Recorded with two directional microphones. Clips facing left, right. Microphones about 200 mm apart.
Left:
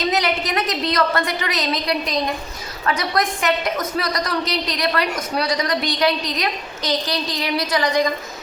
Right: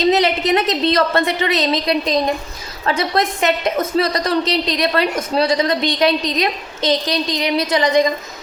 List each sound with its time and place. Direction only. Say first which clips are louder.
0.0 s a woman's voice: right 6 dB; 25° right (ahead or behind)